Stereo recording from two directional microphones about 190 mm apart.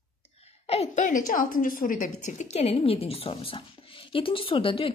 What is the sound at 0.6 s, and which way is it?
A woman's voice, 30° left (ahead or behind).